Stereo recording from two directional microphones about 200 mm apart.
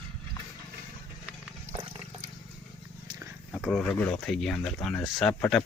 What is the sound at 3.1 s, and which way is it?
Roaring cats, 15° right (ahead or behind).